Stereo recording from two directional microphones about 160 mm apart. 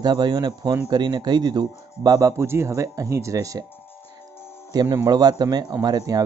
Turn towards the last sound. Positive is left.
turn(degrees=-25)  # may be behind; listen again after turning